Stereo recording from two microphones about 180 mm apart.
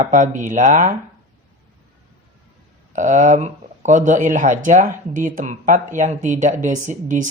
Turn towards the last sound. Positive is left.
turn(degrees=-45)  # may be behind; listen again after turning